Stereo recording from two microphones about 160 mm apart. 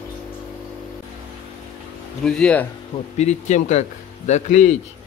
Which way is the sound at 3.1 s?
45° left (ahead or behind).